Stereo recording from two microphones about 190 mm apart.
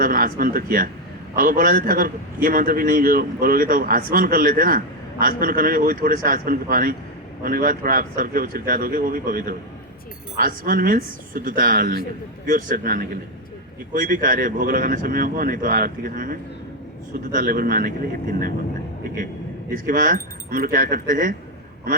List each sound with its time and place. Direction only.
0.0 s a man's voice: 50° right (ahead or behind)
19.7 s a man's voice: 45° right (ahead or behind)